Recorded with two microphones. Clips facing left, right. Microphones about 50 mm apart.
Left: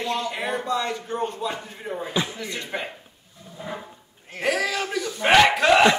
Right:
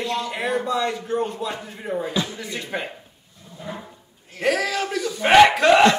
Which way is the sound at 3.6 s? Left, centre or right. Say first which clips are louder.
Even; centre.